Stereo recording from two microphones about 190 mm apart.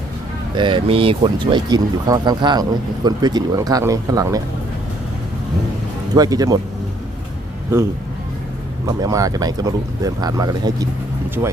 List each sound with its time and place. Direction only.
0.5 s speech: 25° right (ahead or behind)
6.1 s speech: 20° right (ahead or behind)
8.9 s speech: 20° right (ahead or behind)